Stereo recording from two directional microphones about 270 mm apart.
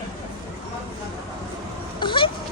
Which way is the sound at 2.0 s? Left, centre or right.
Centre.